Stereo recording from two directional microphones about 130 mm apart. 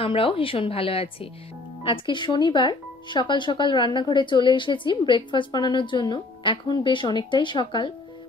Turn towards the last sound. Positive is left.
turn(degrees=40)  # may be behind; listen again after turning